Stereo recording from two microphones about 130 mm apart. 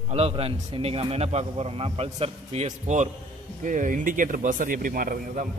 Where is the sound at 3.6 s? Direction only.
85° right.